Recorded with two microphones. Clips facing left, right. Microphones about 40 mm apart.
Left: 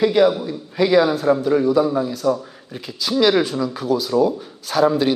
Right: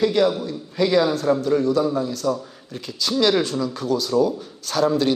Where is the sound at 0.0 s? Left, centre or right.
Centre.